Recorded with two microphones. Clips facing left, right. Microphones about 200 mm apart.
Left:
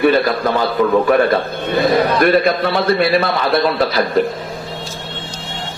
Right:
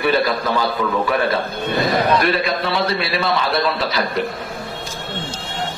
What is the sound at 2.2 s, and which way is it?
A man's voice, 50° left (ahead or behind).